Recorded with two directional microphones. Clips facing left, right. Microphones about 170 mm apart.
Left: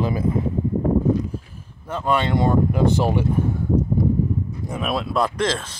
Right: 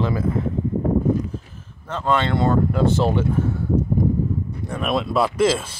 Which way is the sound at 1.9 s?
10° left (ahead or behind).